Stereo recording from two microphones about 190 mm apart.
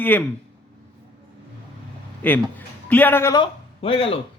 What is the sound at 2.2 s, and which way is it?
A man's voice, 10° left (ahead or behind).